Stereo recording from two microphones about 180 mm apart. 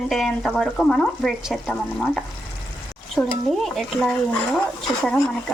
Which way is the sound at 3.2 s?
Centre (ahead or behind).